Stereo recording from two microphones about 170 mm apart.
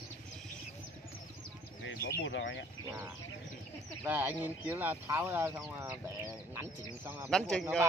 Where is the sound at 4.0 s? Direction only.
10° right (ahead or behind).